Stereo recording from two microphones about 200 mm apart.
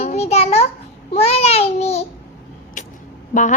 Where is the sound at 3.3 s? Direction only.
40° left (ahead or behind).